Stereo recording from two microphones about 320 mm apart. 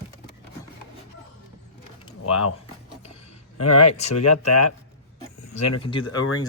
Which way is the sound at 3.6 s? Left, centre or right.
Left.